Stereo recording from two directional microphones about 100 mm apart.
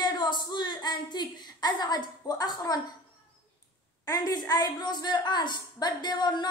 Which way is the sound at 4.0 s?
40° left (ahead or behind).